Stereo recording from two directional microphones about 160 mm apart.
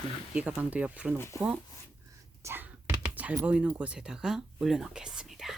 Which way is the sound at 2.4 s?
15° right (ahead or behind).